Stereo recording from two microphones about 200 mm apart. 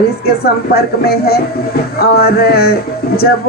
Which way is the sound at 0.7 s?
50° left (ahead or behind).